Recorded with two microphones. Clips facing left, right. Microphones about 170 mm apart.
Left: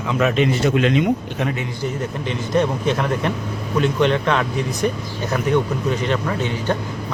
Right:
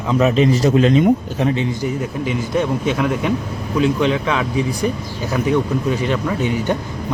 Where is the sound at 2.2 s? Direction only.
5° right (ahead or behind).